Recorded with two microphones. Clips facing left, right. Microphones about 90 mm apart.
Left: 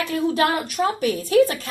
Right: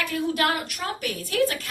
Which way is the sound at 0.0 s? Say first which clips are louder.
Left 4 dB; 25° left (ahead or behind).